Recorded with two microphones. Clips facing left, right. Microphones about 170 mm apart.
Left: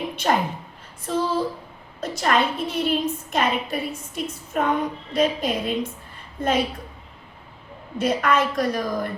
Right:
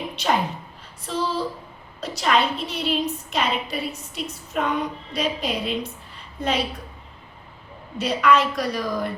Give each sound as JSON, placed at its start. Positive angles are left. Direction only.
{"t": 1.0, "sound": "a woman's voice", "side_deg": 50}
{"t": 7.9, "sound": "a woman's voice", "side_deg": 50}